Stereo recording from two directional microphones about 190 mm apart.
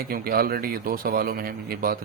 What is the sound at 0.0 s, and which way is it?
A man's voice, 50° right (ahead or behind).